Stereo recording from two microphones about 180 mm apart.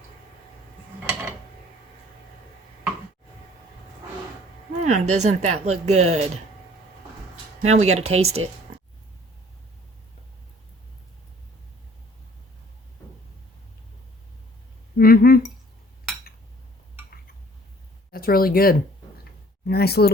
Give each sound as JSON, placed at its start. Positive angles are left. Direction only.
{"t": 4.8, "sound": "speech", "side_deg": -40}
{"t": 7.6, "sound": "speech", "side_deg": -40}
{"t": 14.9, "sound": "cutlery", "side_deg": 55}
{"t": 18.1, "sound": "speech", "side_deg": 55}